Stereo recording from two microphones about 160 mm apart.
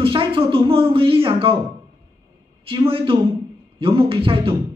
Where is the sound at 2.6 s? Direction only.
35° right (ahead or behind).